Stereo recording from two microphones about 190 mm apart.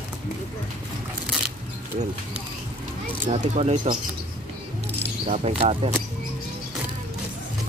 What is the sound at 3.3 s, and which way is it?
Speech, 35° right (ahead or behind).